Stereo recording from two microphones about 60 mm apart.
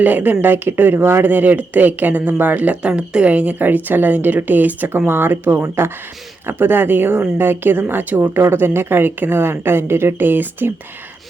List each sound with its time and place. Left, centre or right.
0.0 s speech: right